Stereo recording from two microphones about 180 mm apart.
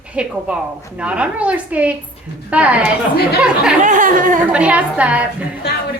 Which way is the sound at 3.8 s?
45° right (ahead or behind).